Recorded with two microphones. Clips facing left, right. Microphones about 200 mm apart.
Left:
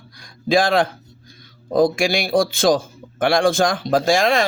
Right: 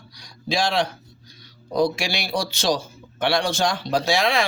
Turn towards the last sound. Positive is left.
turn(degrees=45)  # may be behind; listen again after turning